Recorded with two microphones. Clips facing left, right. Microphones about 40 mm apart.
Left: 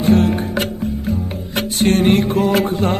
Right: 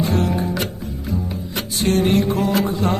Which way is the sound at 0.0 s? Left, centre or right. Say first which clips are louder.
Left 6 dB; left.